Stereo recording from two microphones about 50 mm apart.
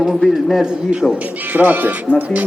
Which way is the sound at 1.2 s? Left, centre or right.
Right.